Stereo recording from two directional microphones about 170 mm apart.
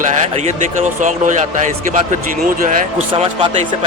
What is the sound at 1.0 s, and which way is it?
Speech, 45° right (ahead or behind).